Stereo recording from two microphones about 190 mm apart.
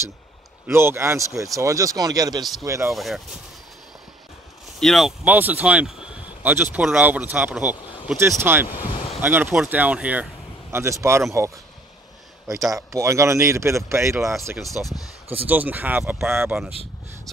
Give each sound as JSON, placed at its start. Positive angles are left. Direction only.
{"t": 0.7, "sound": "speech", "side_deg": -15}
{"t": 2.9, "sound": "speech", "side_deg": 0}
{"t": 4.7, "sound": "speech", "side_deg": 0}
{"t": 12.7, "sound": "speech", "side_deg": -15}